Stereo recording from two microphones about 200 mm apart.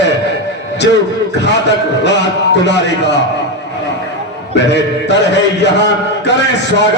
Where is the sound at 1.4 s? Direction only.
60° left (ahead or behind).